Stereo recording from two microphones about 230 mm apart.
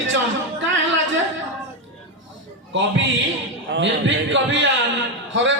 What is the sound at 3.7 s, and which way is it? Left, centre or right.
A man's voice, right.